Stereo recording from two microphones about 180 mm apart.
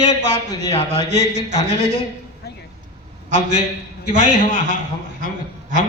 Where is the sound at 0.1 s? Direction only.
75° right (ahead or behind).